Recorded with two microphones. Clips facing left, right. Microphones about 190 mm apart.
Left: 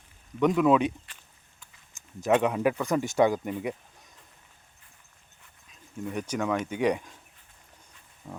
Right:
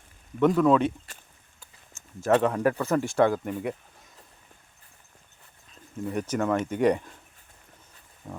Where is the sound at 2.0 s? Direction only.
15° left (ahead or behind).